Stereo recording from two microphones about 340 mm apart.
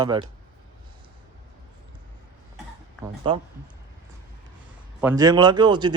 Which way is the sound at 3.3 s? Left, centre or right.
Centre.